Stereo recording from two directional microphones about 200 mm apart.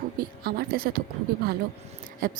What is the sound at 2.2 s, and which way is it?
Speech, 45° right (ahead or behind).